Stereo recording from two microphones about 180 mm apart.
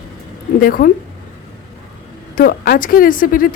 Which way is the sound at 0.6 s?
50° left (ahead or behind).